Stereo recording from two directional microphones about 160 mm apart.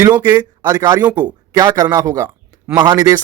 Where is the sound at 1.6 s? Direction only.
25° right (ahead or behind).